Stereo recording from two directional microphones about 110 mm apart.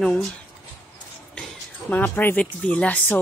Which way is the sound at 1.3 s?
10° left (ahead or behind).